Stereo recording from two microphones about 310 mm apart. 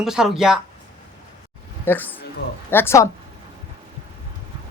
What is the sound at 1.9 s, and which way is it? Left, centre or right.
A man's voice, centre.